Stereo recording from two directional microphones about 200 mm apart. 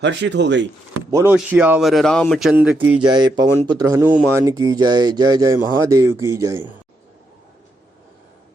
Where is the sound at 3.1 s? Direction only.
20° right (ahead or behind).